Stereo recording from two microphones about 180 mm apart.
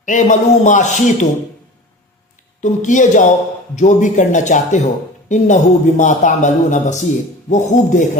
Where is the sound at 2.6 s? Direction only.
45° left (ahead or behind).